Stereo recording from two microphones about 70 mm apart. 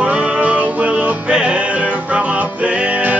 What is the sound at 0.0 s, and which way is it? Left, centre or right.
Music, centre.